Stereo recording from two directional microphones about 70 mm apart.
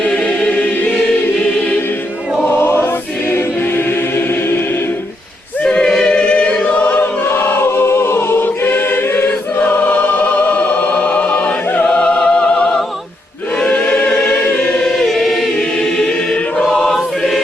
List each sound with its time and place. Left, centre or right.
0.0 s choir: centre
3.3 s choir: left
5.6 s choir: centre
11.9 s music: centre
13.7 s choir: left; by 17.4 s centre